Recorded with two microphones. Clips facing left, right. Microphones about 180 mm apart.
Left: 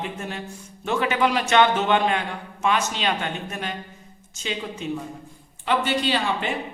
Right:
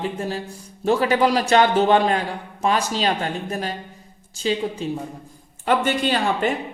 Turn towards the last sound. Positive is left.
turn(degrees=-45)  # may be behind; listen again after turning